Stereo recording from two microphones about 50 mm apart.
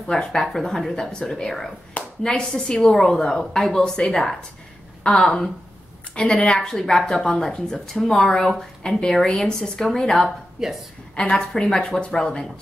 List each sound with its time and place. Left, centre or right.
0.0 s a woman's voice: centre